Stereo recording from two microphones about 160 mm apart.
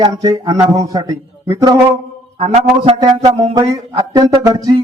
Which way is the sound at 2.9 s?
25° right (ahead or behind).